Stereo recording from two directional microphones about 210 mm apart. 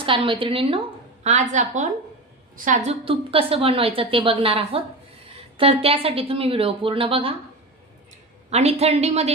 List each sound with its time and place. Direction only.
0.0 s a woman's voice: 25° right (ahead or behind)
8.5 s a woman's voice: 30° right (ahead or behind)